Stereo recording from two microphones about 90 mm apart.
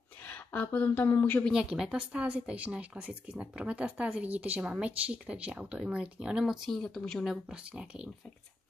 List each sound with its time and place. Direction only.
0.2 s speech: 15° left (ahead or behind)
1.5 s speech: 10° right (ahead or behind)
7.2 s speech: 5° right (ahead or behind)